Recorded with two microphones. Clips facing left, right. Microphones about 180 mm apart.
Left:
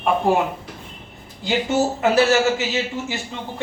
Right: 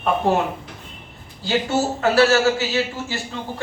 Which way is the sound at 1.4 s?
20° left (ahead or behind).